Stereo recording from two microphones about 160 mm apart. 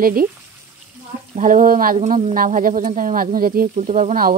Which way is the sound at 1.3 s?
50° right (ahead or behind).